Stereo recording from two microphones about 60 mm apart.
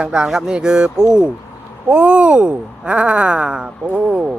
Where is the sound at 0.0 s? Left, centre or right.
Centre.